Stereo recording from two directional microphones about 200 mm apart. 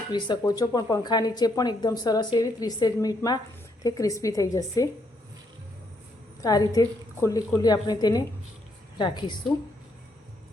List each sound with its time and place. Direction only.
0.1 s a woman's voice: 20° left (ahead or behind)
6.4 s speech: 20° left (ahead or behind)